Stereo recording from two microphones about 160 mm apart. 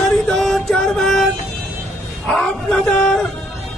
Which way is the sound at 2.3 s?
5° left (ahead or behind).